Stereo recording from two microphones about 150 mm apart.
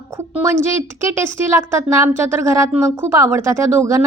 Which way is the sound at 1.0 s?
20° right (ahead or behind).